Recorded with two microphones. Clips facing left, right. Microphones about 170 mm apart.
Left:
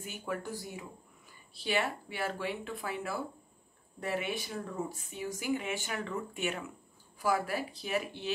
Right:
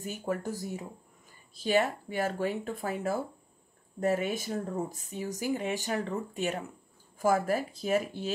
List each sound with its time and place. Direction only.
0.0 s speech: 40° right (ahead or behind)